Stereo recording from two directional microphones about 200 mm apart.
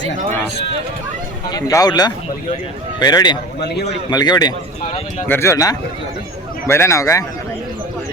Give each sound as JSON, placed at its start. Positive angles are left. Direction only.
{"t": 1.5, "sound": "speech", "side_deg": 20}
{"t": 3.6, "sound": "a man's voice", "side_deg": 55}
{"t": 4.1, "sound": "a man's voice", "side_deg": 20}